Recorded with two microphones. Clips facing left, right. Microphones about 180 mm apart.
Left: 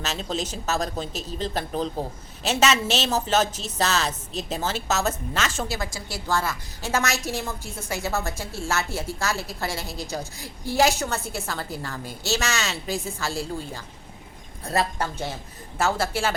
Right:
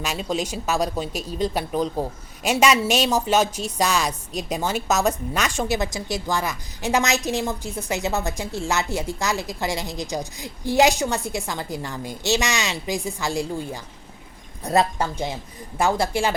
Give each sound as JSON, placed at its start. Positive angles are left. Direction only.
{"t": 0.0, "sound": "a woman's voice", "side_deg": -10}